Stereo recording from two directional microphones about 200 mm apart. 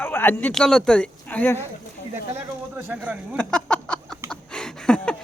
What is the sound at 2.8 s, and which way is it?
Speech, 10° right (ahead or behind).